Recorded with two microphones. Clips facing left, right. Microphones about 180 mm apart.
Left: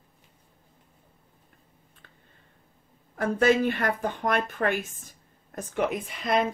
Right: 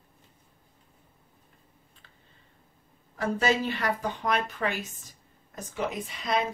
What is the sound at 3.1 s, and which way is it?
Speech, 55° left (ahead or behind).